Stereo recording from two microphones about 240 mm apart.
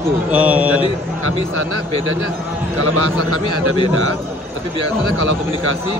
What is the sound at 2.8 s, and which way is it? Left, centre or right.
Speech, right.